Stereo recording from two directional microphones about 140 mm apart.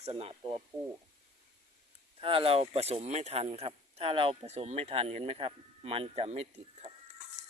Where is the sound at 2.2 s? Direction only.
40° right (ahead or behind).